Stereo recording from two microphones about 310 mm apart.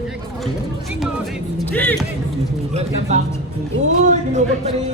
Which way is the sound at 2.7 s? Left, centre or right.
Right.